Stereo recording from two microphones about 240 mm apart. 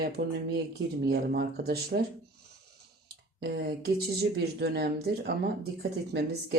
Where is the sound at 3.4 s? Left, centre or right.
Right.